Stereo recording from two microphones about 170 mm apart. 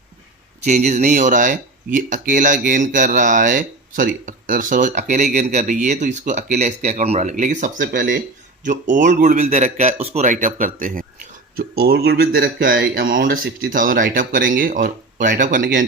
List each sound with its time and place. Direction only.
0.6 s speech: 45° right (ahead or behind)
11.5 s speech: 65° right (ahead or behind)